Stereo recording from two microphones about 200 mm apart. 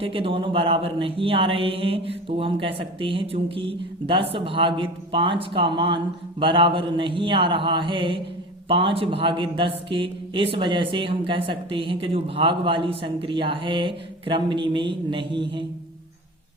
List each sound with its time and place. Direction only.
0.0 s a man's voice: 30° right (ahead or behind)